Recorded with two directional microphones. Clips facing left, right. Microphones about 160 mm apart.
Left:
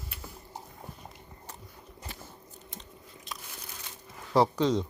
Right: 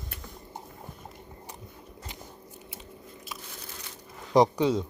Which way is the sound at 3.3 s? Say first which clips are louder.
Even; 5° right (ahead or behind).